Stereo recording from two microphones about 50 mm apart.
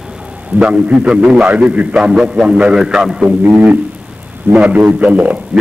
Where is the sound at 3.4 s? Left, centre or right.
Right.